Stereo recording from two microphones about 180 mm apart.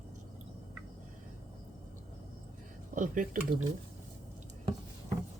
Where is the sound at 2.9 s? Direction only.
45° right (ahead or behind).